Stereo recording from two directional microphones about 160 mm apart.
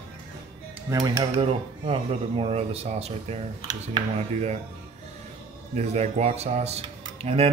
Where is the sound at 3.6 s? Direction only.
25° right (ahead or behind).